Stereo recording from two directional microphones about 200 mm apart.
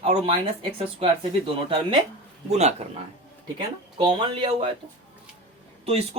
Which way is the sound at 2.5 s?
30° right (ahead or behind).